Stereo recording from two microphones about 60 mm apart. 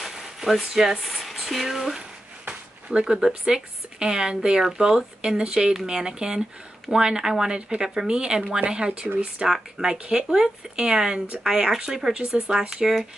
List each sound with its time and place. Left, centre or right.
0.0 s speech: centre
2.4 s a sound: centre
3.3 s speech: centre
9.5 s speech: centre